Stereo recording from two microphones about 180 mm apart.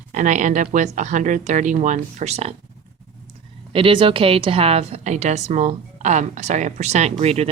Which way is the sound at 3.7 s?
30° right (ahead or behind).